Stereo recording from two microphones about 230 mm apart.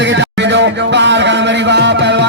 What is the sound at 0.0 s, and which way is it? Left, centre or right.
Music, right.